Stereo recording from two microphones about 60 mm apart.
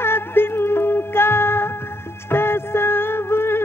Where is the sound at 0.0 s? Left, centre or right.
Left.